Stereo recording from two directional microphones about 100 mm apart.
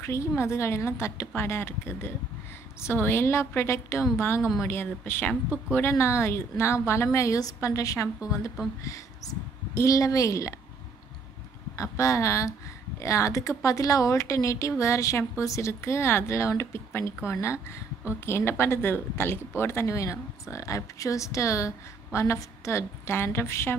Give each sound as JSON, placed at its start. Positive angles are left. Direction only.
{"t": 0.0, "sound": "a woman's voice", "side_deg": 30}
{"t": 11.7, "sound": "speech", "side_deg": 30}